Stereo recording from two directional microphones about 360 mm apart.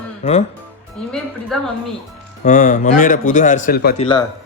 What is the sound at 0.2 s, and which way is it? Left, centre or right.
Speech, centre.